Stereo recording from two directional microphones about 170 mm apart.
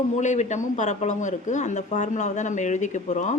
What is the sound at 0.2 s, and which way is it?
A woman's voice, 45° left (ahead or behind).